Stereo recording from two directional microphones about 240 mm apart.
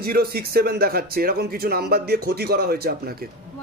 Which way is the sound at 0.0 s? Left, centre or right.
Right.